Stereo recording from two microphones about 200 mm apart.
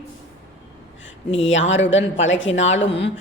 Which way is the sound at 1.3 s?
70° left (ahead or behind).